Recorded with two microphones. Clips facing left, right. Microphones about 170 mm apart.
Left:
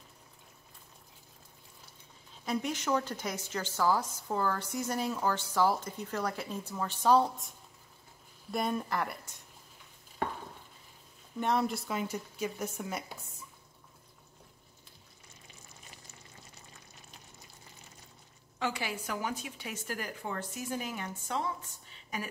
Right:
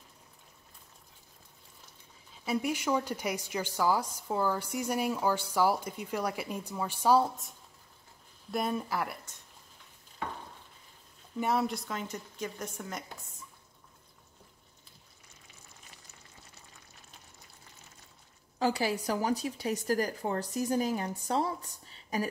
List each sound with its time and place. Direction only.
2.4 s a woman's voice: 10° right (ahead or behind)
11.3 s a woman's voice: 5° right (ahead or behind)
18.6 s a woman's voice: 35° right (ahead or behind)
21.8 s a sound: 35° right (ahead or behind)